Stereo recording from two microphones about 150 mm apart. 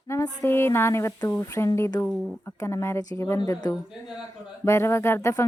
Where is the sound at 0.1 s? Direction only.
15° left (ahead or behind).